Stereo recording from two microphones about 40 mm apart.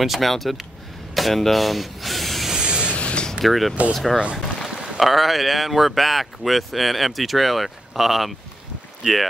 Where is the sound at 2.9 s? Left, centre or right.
Left.